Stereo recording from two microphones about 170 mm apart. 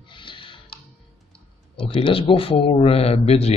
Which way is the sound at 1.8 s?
30° left (ahead or behind).